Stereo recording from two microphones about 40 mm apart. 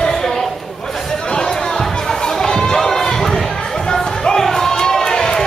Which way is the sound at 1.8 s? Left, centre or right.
Centre.